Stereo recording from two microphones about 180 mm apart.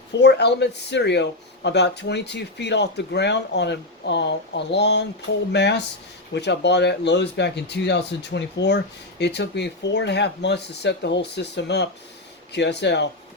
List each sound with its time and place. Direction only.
0.2 s speech: 70° left (ahead or behind)